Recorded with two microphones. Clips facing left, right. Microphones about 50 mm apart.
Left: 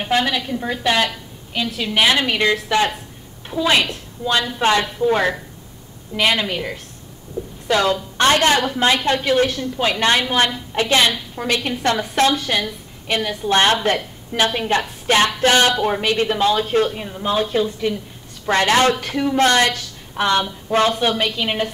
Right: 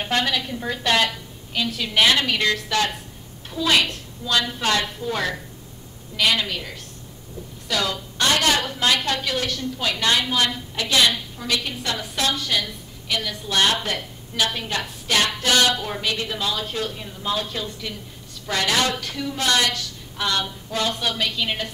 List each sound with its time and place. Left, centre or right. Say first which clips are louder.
0.0 s a woman's voice: left 4 dB; centre; by 17.9 s left
18.4 s a woman's voice: left 7 dB; left